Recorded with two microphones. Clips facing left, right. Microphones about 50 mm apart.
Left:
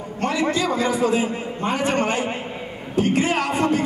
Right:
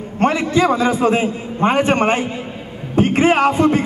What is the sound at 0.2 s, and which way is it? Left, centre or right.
A man's voice, right.